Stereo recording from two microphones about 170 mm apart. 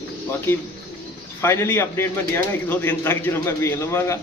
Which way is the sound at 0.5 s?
10° left (ahead or behind).